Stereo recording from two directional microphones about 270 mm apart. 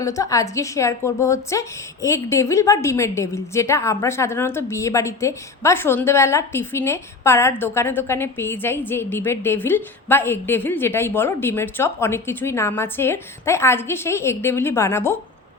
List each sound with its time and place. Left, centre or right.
0.0 s a woman's voice: centre